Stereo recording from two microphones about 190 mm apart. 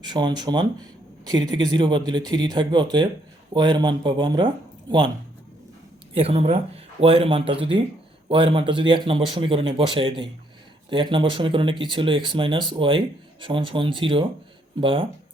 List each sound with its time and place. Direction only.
0.0 s speech: 25° right (ahead or behind)
6.1 s speech: 30° right (ahead or behind)